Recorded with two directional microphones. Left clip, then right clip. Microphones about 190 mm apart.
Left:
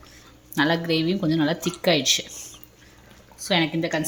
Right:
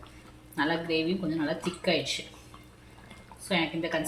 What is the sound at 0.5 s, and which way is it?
A woman's voice, 60° left (ahead or behind).